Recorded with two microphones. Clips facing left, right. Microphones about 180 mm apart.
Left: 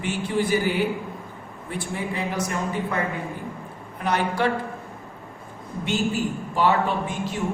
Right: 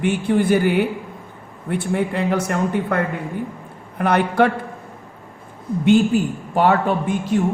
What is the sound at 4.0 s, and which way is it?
Speech, 60° right (ahead or behind).